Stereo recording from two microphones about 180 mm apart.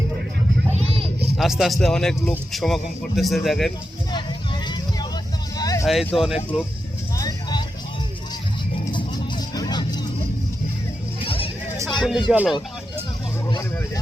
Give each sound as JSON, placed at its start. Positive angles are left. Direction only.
{"t": 0.7, "sound": "children playing", "side_deg": -35}
{"t": 1.4, "sound": "speech", "side_deg": 0}
{"t": 4.1, "sound": "a sound", "side_deg": 25}
{"t": 5.8, "sound": "speech", "side_deg": 0}
{"t": 7.2, "sound": "vehicle", "side_deg": 20}
{"t": 8.9, "sound": "vehicle", "side_deg": 25}
{"t": 11.3, "sound": "music", "side_deg": 30}
{"t": 11.9, "sound": "music", "side_deg": 0}
{"t": 12.3, "sound": "speech", "side_deg": -5}
{"t": 13.5, "sound": "speech", "side_deg": 25}